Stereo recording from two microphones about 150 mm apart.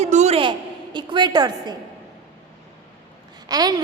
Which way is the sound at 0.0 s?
50° right (ahead or behind).